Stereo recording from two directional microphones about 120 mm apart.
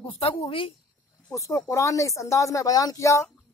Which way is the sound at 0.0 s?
50° left (ahead or behind).